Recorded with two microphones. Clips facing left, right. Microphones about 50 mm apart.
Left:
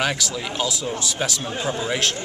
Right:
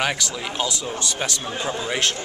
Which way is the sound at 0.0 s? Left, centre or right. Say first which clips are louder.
Even; centre.